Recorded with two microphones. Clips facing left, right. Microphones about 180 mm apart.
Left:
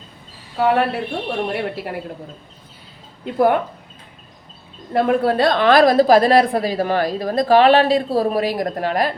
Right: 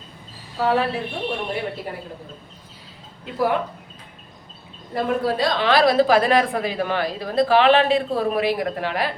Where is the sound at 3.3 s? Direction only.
55° left (ahead or behind).